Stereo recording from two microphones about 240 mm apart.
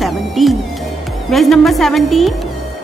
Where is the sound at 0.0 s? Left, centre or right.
Centre.